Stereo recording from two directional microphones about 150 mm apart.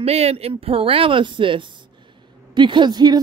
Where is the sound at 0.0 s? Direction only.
45° right (ahead or behind).